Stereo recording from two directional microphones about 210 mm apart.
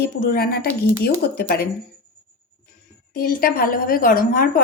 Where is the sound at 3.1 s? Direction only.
45° left (ahead or behind).